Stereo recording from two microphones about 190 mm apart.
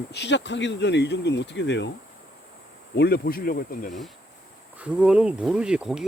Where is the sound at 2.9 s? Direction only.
60° left (ahead or behind).